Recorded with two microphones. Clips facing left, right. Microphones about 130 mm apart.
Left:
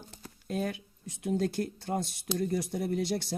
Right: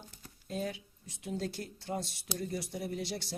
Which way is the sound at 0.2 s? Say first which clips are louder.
Left 4 dB; 60° left (ahead or behind).